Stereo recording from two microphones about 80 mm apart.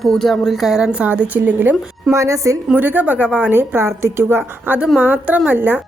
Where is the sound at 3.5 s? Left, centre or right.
Right.